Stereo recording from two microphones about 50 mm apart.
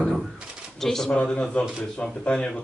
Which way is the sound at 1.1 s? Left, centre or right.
Centre.